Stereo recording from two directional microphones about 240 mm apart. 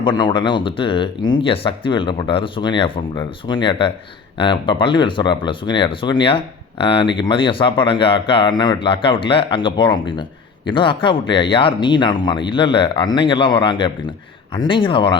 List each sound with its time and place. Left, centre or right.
0.0 s speech: centre